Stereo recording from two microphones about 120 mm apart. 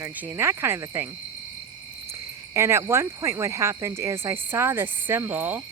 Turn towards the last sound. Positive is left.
turn(degrees=-15)  # may be behind; listen again after turning